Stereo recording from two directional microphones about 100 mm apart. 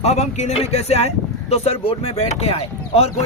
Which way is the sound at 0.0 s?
90° left.